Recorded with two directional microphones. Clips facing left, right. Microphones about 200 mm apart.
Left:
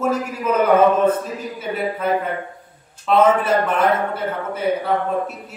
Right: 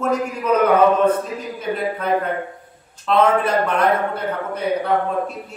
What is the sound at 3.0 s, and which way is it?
A man's voice, 5° left (ahead or behind).